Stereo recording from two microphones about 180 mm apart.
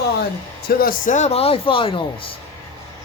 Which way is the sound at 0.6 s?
50° left (ahead or behind).